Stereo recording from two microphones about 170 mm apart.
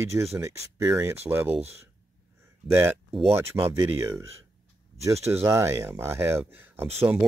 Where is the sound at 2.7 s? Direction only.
15° right (ahead or behind).